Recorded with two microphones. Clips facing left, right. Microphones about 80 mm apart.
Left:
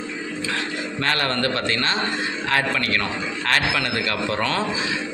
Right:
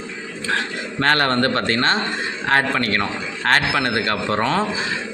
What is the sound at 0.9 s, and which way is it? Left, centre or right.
Speech, right.